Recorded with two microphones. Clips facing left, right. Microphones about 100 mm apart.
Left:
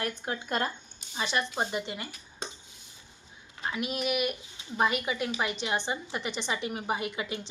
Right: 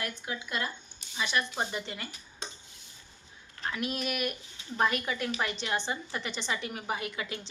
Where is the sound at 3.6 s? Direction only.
10° left (ahead or behind).